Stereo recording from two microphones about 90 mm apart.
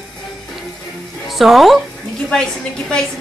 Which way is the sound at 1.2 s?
Centre (ahead or behind).